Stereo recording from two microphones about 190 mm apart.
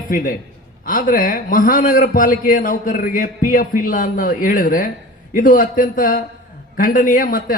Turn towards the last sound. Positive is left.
turn(degrees=45)  # may be behind; listen again after turning